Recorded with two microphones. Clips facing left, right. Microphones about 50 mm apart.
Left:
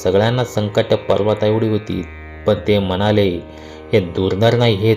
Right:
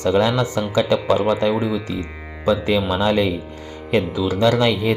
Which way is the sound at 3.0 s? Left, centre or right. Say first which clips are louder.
Left 3 dB; left.